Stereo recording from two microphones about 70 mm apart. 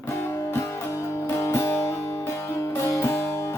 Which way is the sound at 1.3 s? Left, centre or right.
Left.